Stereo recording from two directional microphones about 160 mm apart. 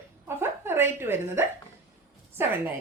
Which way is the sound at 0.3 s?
15° right (ahead or behind).